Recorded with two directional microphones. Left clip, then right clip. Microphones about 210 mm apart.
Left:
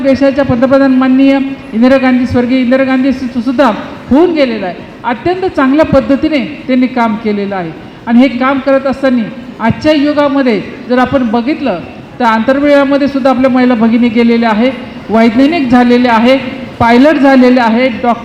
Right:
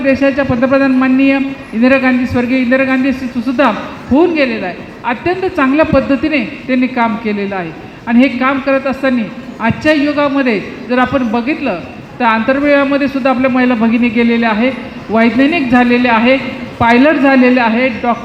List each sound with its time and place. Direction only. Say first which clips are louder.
0.0 s a man's voice: left 3 dB; 50° left (ahead or behind)